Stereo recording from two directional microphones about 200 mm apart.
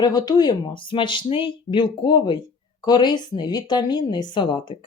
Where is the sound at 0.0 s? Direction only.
20° left (ahead or behind).